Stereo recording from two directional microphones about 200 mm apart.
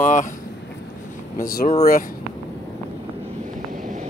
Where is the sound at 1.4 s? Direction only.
45° left (ahead or behind).